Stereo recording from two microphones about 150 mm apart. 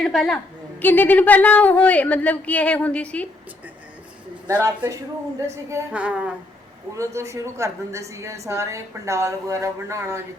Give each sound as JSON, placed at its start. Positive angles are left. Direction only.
{"t": 0.0, "sound": "a woman's voice", "side_deg": 5}
{"t": 4.4, "sound": "a man's voice", "side_deg": -15}
{"t": 5.9, "sound": "a man's voice", "side_deg": -10}
{"t": 6.9, "sound": "a woman's voice", "side_deg": -20}